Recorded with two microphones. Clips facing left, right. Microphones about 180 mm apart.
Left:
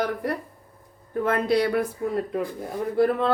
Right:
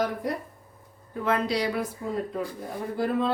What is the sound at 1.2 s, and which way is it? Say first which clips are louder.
Speech: left 4 dB; 55° left (ahead or behind).